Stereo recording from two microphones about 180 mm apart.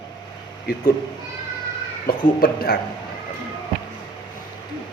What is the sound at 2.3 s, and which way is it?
Speech, 55° left (ahead or behind).